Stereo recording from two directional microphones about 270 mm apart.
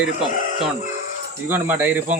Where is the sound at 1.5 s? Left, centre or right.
Centre.